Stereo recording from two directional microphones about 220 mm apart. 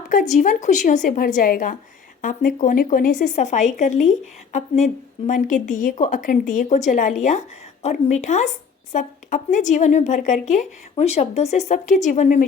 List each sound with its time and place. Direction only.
0.1 s speech: 35° left (ahead or behind)